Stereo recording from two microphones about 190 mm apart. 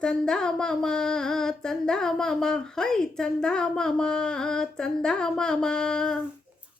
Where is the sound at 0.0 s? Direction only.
5° left (ahead or behind).